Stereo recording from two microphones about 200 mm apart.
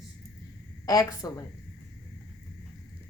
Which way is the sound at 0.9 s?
20° left (ahead or behind).